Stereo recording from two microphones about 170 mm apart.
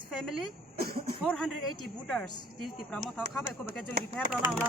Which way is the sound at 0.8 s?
65° right (ahead or behind).